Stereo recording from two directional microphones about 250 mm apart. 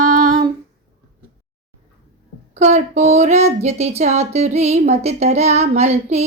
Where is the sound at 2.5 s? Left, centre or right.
Right.